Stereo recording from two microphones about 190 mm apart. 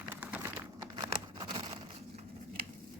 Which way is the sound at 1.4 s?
25° right (ahead or behind).